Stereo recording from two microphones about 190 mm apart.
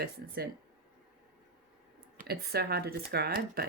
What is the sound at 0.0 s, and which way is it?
Speech, 55° right (ahead or behind).